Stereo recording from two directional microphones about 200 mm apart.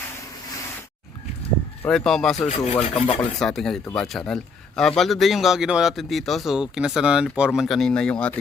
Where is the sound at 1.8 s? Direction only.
Centre (ahead or behind).